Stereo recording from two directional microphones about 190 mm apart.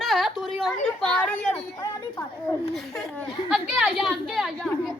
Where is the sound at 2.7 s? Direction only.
Centre (ahead or behind).